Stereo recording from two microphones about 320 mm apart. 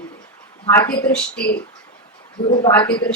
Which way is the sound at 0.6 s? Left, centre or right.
Centre.